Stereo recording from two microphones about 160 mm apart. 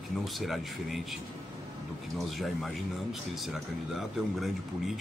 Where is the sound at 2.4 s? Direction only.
Centre (ahead or behind).